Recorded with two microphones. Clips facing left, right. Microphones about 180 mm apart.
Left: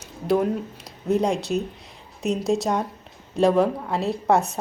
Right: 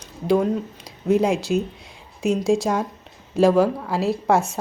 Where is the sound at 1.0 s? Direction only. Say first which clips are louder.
Right 3 dB; centre (ahead or behind).